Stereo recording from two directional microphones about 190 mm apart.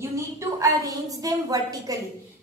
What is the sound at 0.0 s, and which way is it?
A woman's voice, 15° right (ahead or behind).